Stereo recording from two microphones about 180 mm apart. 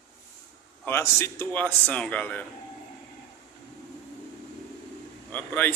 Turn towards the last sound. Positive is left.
turn(degrees=10)  # may be behind; listen again after turning